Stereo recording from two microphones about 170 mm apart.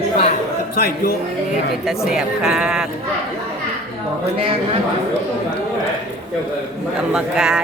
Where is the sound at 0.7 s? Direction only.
60° left (ahead or behind).